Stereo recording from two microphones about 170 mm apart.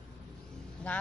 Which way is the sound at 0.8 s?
5° left (ahead or behind).